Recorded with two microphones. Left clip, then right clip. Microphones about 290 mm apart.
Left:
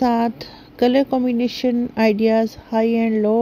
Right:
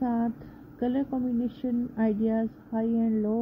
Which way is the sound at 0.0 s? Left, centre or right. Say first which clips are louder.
Left 12 dB; left.